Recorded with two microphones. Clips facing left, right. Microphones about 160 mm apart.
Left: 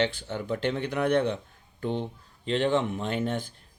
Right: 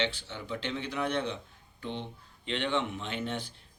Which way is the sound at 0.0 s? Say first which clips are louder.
Left 6 dB; 50° left (ahead or behind).